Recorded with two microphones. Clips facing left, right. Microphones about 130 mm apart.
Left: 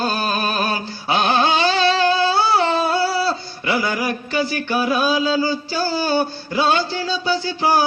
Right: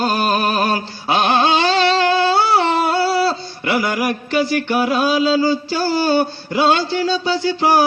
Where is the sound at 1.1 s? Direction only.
20° right (ahead or behind).